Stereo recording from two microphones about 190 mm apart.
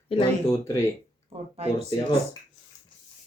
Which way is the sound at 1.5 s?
35° right (ahead or behind).